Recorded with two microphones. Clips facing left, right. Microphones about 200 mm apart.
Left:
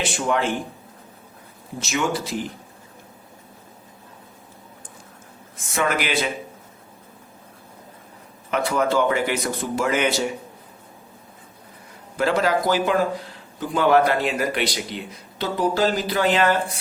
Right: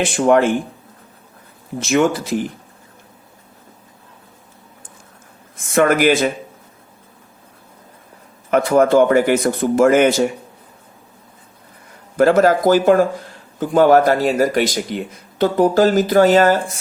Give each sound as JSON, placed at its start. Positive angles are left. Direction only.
{"t": 0.0, "sound": "a man's voice", "side_deg": -55}
{"t": 1.8, "sound": "a man's voice", "side_deg": -55}
{"t": 5.7, "sound": "a man's voice", "side_deg": -50}
{"t": 8.4, "sound": "a man's voice", "side_deg": -50}
{"t": 12.1, "sound": "a man's voice", "side_deg": -50}